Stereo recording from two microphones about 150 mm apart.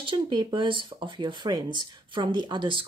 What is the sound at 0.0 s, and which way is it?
Speech, 35° right (ahead or behind).